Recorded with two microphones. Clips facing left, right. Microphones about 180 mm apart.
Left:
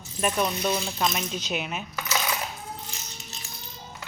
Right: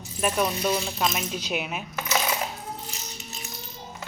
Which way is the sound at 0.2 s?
Centre (ahead or behind).